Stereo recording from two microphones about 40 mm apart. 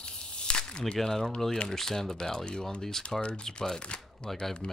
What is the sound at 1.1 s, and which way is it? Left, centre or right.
Speech, centre.